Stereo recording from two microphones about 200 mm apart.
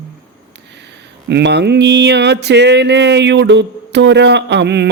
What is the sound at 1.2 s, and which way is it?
Speech, 55° right (ahead or behind).